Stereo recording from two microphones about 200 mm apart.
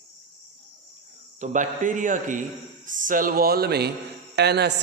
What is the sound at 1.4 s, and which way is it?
A man's voice, 40° right (ahead or behind).